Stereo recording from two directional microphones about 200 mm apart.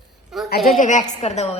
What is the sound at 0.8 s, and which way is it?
Speech, 40° left (ahead or behind).